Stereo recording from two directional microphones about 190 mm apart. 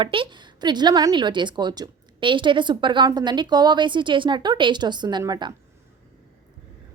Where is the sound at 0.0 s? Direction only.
25° right (ahead or behind).